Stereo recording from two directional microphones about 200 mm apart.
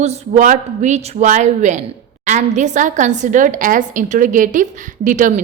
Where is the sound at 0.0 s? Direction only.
35° right (ahead or behind).